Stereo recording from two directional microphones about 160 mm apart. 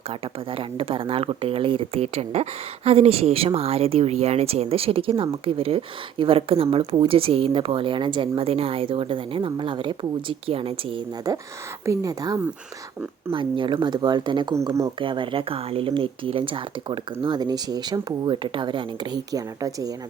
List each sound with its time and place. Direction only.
0.1 s speech: 35° right (ahead or behind)
11.3 s speech: 20° right (ahead or behind)
14.7 s speech: 20° right (ahead or behind)
14.9 s speech: 30° right (ahead or behind)